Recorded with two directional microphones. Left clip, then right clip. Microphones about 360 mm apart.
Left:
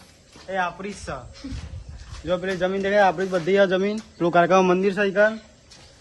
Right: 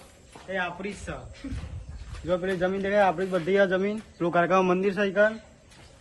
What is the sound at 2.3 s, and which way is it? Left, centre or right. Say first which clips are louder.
Speech: left 3 dB; left.